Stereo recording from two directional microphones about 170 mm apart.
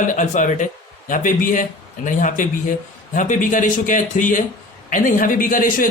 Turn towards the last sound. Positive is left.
turn(degrees=55)  # may be behind; listen again after turning